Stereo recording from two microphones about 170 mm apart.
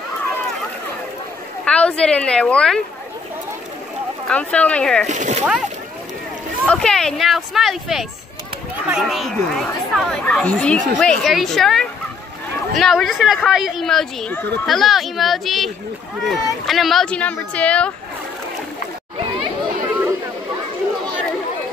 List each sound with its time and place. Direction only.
1.6 s speech: 5° left (ahead or behind)
4.3 s speech: 5° left (ahead or behind)
5.0 s speech: 45° right (ahead or behind)
6.6 s a woman's voice: 5° left (ahead or behind)